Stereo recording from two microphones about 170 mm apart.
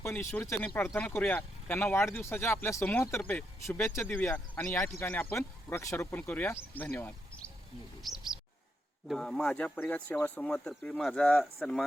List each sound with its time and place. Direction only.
0.0 s speech: 15° left (ahead or behind)
9.0 s speech: 5° left (ahead or behind)